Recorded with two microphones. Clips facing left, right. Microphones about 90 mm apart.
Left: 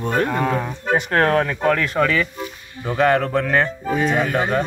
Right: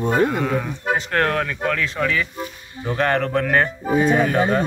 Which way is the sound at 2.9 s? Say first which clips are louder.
Left 3 dB; 5° left (ahead or behind).